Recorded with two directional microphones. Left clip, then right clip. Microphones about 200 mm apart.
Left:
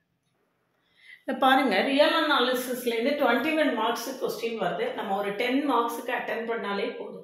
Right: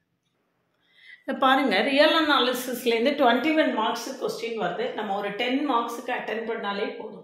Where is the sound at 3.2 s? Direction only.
65° right (ahead or behind).